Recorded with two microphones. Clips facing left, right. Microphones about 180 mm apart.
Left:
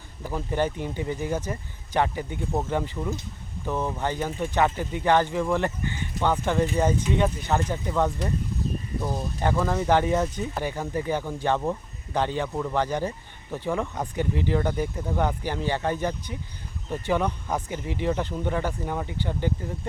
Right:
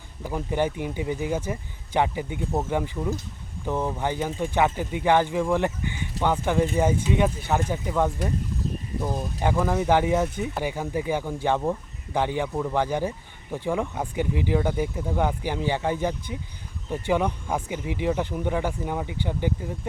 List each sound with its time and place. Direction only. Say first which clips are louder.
0.2 s speech: right 1 dB; 15° right (ahead or behind)
9.4 s speech: right 1 dB; 15° right (ahead or behind)